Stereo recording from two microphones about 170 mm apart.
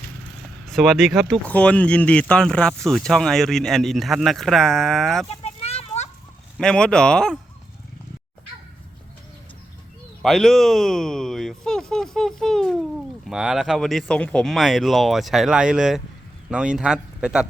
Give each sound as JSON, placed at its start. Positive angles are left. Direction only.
{"t": 0.6, "sound": "speech", "side_deg": 0}
{"t": 5.3, "sound": "a sound", "side_deg": 35}
{"t": 6.6, "sound": "speech", "side_deg": 5}
{"t": 10.2, "sound": "speech", "side_deg": 0}